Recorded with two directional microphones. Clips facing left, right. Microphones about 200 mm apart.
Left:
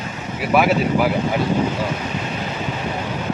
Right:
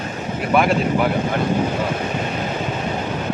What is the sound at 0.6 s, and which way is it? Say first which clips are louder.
Speech: left 1 dB; 5° left (ahead or behind).